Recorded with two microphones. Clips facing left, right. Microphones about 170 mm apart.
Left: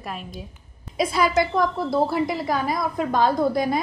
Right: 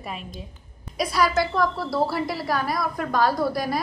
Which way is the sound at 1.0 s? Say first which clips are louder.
Left 2 dB; 25° left (ahead or behind).